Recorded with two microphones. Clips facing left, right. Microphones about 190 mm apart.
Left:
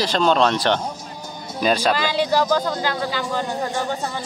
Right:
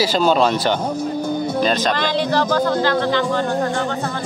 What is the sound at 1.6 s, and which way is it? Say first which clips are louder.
Speech: left 2 dB; 10° left (ahead or behind).